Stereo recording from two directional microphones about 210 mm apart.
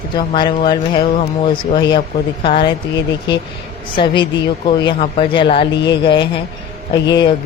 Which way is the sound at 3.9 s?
25° left (ahead or behind).